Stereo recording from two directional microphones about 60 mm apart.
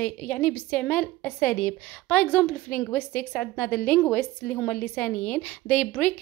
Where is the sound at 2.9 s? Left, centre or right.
Left.